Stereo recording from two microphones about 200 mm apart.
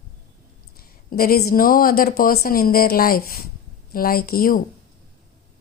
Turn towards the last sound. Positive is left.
turn(degrees=45)  # may be behind; listen again after turning